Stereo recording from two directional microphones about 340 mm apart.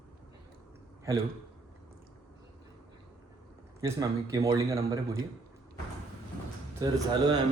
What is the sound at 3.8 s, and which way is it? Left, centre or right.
A man's voice, centre.